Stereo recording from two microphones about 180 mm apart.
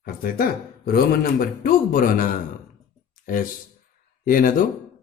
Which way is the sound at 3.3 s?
50° left (ahead or behind).